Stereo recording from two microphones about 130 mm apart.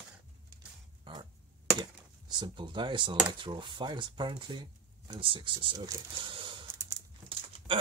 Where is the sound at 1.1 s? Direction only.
35° right (ahead or behind).